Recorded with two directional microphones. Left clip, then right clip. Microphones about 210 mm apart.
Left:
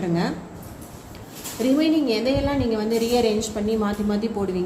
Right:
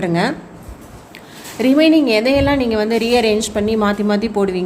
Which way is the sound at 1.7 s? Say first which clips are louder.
Right 9 dB; 50° right (ahead or behind).